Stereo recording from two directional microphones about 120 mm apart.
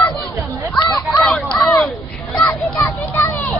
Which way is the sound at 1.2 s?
Centre (ahead or behind).